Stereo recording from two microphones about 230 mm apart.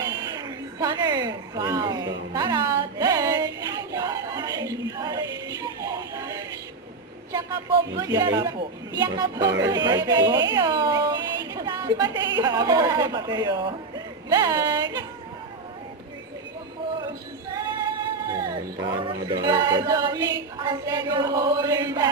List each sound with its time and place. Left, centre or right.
0.2 s a woman's voice: centre
3.9 s a sound: centre
5.6 s music: centre
7.9 s speech: centre
17.5 s female singing: centre
19.0 s speech: centre